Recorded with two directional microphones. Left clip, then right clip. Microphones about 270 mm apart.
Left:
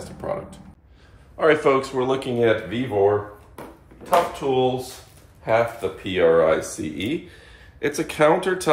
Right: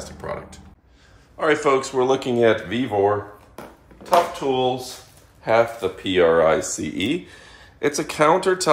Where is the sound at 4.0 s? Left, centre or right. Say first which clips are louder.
Right 1 dB; right.